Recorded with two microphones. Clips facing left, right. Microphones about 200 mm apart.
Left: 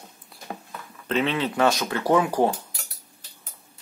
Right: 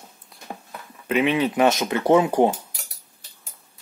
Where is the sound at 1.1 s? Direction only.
15° right (ahead or behind).